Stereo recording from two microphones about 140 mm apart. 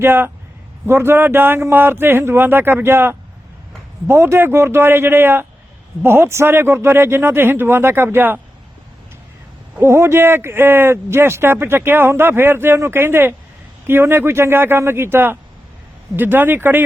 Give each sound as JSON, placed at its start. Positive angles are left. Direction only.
{"t": 0.0, "sound": "speech", "side_deg": -15}
{"t": 9.7, "sound": "speech", "side_deg": -20}